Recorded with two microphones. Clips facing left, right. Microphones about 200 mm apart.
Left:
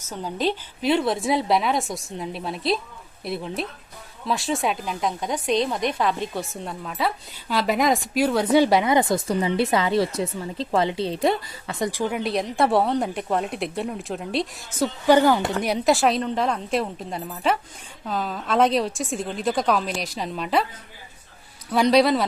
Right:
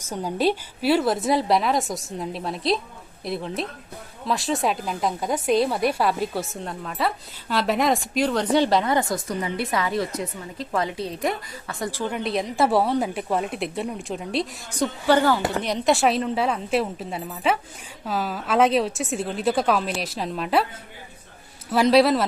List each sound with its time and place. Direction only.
0.0 s a woman's voice: 10° right (ahead or behind); by 11.3 s 30° left (ahead or behind)
11.7 s speech: 15° left (ahead or behind)
15.0 s speech: 15° left (ahead or behind); by 20.7 s centre (ahead or behind)
21.7 s speech: 5° right (ahead or behind)